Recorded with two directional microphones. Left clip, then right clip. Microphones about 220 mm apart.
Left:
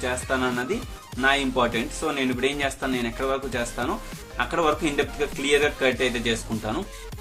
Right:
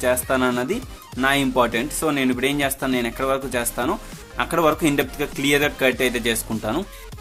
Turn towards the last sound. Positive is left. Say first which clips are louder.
# right 3 dB
turn(degrees=-50)  # may be behind; listen again after turning